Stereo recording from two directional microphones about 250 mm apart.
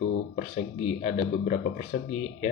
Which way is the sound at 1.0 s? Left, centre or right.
Left.